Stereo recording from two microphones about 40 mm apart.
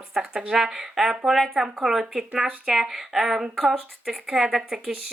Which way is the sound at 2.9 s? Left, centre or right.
Centre.